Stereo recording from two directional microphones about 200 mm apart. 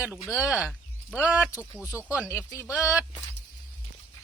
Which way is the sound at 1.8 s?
10° right (ahead or behind).